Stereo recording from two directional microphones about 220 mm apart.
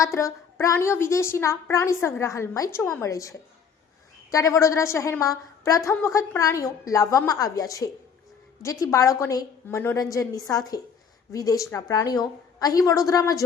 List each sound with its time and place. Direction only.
0.0 s a woman's voice: 15° left (ahead or behind)